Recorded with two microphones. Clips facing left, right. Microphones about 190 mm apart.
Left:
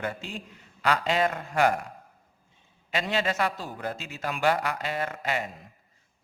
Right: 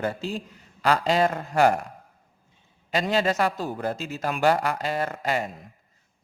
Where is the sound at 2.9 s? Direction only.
40° right (ahead or behind).